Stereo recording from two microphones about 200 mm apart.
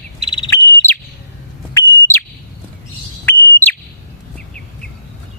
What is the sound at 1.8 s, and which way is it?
Bird, 10° left (ahead or behind).